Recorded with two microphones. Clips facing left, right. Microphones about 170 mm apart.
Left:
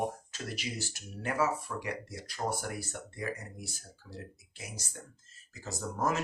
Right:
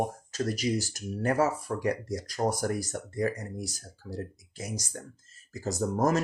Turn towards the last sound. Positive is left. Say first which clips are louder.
# right 7 dB
turn(degrees=-40)  # may be behind; listen again after turning